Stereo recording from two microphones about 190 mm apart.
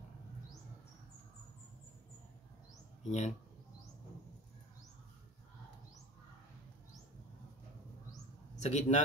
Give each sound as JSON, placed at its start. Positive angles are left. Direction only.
{"t": 3.0, "sound": "speech", "side_deg": 40}
{"t": 8.5, "sound": "a man's voice", "side_deg": 35}